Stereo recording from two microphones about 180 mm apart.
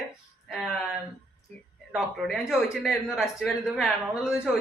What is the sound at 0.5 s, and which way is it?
Speech, centre (ahead or behind).